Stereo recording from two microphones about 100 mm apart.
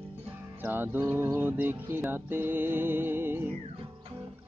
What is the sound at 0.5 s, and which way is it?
Speech, 20° right (ahead or behind).